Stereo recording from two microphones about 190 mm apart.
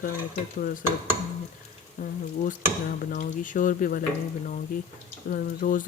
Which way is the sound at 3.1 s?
45° left (ahead or behind).